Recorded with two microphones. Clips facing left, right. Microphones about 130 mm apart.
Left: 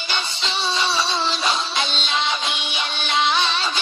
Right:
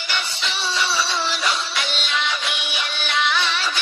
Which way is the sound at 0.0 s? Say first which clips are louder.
Even; 20° left (ahead or behind).